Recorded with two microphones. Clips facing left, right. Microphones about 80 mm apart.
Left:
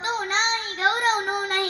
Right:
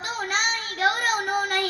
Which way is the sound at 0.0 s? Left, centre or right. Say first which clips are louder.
Left 2 dB; left.